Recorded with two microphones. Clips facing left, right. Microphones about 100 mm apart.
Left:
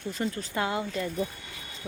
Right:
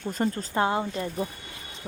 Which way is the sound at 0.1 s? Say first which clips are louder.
Right 4 dB; 45° right (ahead or behind).